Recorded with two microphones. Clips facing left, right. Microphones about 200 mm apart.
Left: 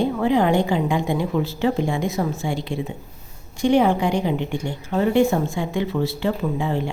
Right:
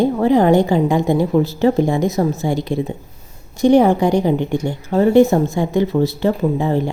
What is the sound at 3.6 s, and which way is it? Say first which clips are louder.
A woman's voice: right 6 dB; 40° right (ahead or behind).